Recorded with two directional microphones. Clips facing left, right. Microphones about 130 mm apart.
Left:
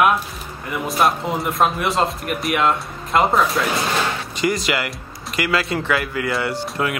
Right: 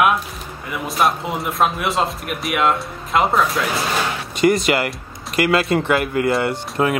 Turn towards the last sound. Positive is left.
turn(degrees=-30)  # may be behind; listen again after turning